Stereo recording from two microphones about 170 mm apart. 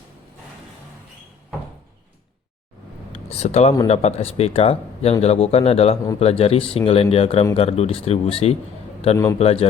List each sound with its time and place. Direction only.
3.1 s speech: 40° left (ahead or behind)